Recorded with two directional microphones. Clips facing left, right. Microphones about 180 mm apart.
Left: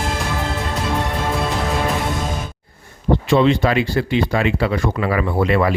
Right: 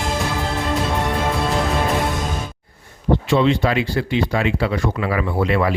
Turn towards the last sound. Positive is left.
turn(degrees=50)  # may be behind; listen again after turning